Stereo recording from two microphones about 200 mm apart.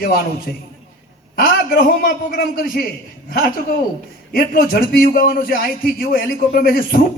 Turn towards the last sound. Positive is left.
turn(degrees=45)  # may be behind; listen again after turning